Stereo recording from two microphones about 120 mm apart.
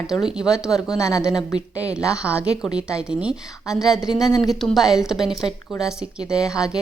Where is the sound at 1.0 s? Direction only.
25° left (ahead or behind).